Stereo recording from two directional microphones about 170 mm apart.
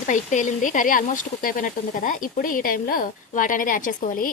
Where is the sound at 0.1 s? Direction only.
45° left (ahead or behind).